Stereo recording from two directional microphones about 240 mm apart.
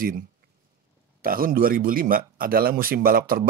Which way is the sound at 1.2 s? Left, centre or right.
Right.